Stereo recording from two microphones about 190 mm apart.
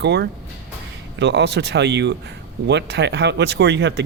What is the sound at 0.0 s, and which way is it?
Speech, 65° right (ahead or behind).